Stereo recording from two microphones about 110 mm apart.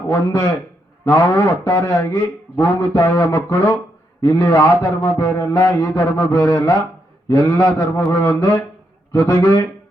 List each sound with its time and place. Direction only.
0.1 s a man's voice: 25° left (ahead or behind)